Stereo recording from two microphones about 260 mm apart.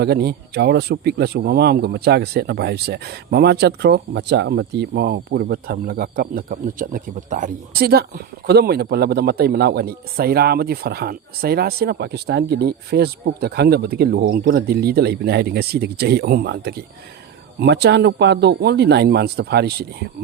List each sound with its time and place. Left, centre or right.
0.0 s speech: right